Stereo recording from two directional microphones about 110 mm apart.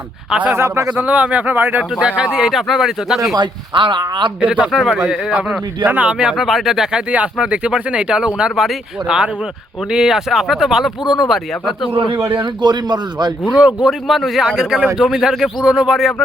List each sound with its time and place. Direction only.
0.3 s speech: 10° right (ahead or behind)
0.5 s speech: 25° right (ahead or behind)
0.9 s speech: 10° right (ahead or behind)
3.3 s speech: 45° right (ahead or behind)
4.4 s speech: 10° right (ahead or behind)
12.4 s speech: 40° right (ahead or behind)
13.8 s speech: centre (ahead or behind)